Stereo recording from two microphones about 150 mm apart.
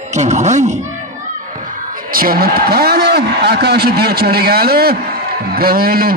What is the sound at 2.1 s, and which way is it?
A man's voice, 75° right (ahead or behind).